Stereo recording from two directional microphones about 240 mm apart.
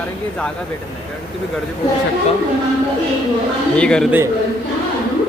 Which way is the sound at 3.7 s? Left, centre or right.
Centre.